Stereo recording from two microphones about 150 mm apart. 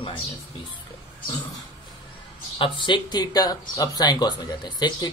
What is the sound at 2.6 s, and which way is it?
Speech, 30° left (ahead or behind).